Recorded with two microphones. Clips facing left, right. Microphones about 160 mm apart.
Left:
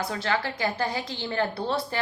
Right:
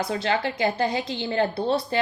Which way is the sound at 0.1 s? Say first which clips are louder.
Right 3 dB; 20° right (ahead or behind).